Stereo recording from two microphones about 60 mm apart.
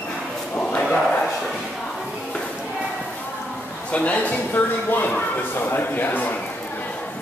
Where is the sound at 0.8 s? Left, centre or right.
Centre.